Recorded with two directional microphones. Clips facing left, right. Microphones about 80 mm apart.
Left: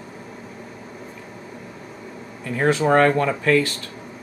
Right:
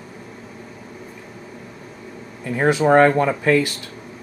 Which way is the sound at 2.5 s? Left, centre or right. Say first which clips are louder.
Right 3 dB; centre.